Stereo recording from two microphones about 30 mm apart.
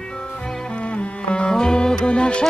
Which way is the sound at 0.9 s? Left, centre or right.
Left.